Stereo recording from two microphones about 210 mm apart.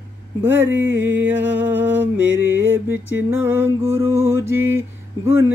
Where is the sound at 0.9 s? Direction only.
60° right (ahead or behind).